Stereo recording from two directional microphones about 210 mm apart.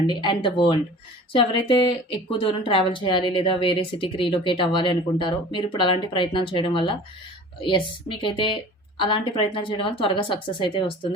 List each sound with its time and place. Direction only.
0.1 s speech: 20° left (ahead or behind)